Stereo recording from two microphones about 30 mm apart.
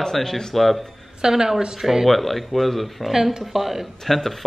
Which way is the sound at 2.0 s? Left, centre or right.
Centre.